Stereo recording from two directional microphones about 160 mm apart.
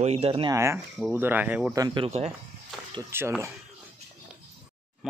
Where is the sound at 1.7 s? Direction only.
20° right (ahead or behind).